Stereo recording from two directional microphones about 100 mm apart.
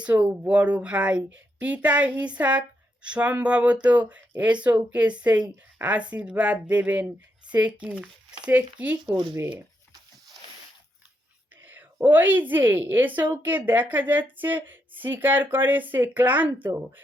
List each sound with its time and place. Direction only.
0.0 s a woman's voice: 15° right (ahead or behind)
9.0 s speech: 50° right (ahead or behind)
11.6 s a woman's voice: 20° right (ahead or behind)